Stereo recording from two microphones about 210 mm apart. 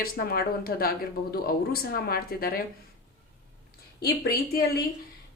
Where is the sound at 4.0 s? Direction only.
45° left (ahead or behind).